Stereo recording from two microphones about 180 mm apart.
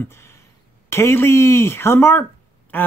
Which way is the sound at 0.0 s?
15° left (ahead or behind).